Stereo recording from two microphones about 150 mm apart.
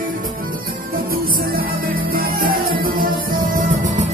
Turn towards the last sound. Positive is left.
turn(degrees=-60)  # may be behind; listen again after turning